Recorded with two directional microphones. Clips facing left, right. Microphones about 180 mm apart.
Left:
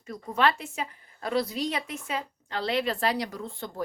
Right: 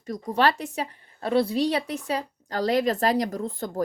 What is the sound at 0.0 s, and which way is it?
A woman's voice, 35° right (ahead or behind).